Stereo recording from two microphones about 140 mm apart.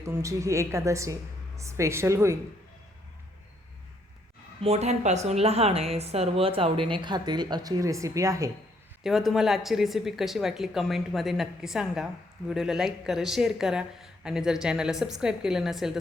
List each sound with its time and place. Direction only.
0.0 s a woman's voice: 20° right (ahead or behind)
4.6 s a woman's voice: 50° right (ahead or behind); by 8.4 s 20° right (ahead or behind)
9.0 s speech: centre (ahead or behind)